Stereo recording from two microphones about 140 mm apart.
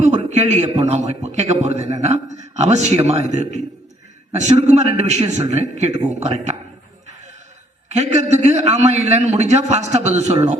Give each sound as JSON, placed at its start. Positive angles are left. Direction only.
{"t": 0.0, "sound": "a man's voice", "side_deg": -55}
{"t": 7.9, "sound": "a man's voice", "side_deg": -55}